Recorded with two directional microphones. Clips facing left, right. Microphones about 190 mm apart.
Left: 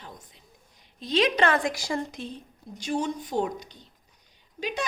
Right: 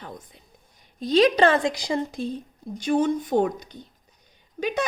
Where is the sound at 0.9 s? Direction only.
40° right (ahead or behind); by 2.2 s 20° right (ahead or behind).